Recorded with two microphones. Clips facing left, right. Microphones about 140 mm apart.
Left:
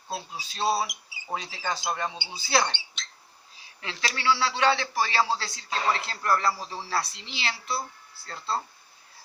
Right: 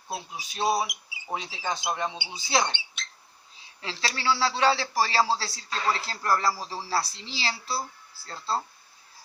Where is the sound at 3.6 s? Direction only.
30° right (ahead or behind).